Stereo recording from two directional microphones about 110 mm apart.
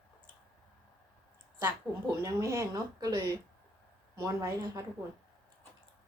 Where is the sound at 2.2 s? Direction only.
25° right (ahead or behind).